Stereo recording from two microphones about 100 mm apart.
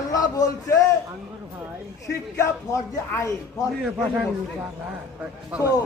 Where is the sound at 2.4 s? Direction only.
30° left (ahead or behind).